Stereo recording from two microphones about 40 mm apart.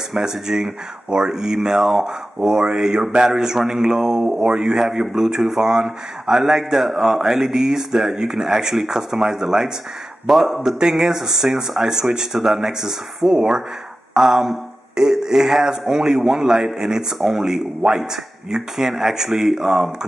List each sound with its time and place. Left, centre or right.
0.1 s a man's voice: centre